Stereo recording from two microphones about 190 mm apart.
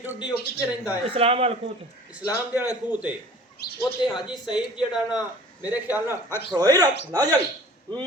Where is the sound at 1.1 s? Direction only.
30° right (ahead or behind).